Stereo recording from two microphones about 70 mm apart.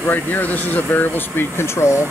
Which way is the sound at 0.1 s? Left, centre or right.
Left.